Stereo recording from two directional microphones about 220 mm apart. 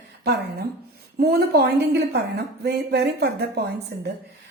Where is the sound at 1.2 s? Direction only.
45° right (ahead or behind).